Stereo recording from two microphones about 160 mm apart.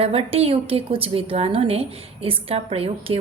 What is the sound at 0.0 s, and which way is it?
A woman's voice, 40° right (ahead or behind).